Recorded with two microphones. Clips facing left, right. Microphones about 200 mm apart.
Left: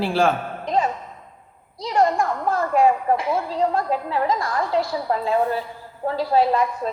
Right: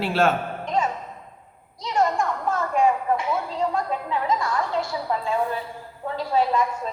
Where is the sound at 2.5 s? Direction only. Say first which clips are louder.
Left 3 dB; 35° left (ahead or behind).